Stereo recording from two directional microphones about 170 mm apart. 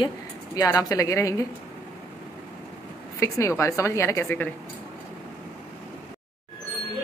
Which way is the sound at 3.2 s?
15° left (ahead or behind).